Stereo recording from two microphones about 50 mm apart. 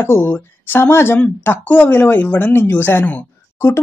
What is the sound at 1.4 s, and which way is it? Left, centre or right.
Speech, left.